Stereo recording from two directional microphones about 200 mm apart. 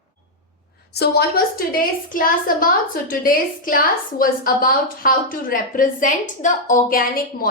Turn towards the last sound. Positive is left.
turn(degrees=45)  # may be behind; listen again after turning